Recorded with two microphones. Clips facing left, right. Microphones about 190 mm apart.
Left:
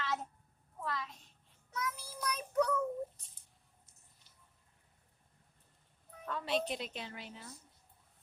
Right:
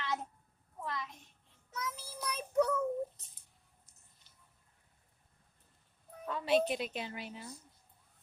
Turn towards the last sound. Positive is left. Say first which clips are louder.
# right 4 dB
turn(degrees=-10)  # may be behind; listen again after turning